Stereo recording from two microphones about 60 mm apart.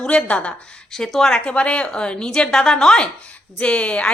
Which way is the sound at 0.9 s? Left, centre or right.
Centre.